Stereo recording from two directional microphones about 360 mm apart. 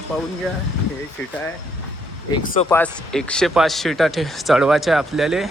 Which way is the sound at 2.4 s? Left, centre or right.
Left.